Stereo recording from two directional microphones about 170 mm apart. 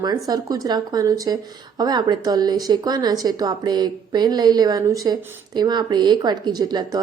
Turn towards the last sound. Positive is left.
turn(degrees=-25)  # may be behind; listen again after turning